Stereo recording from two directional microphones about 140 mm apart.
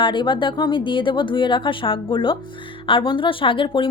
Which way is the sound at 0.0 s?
35° left (ahead or behind).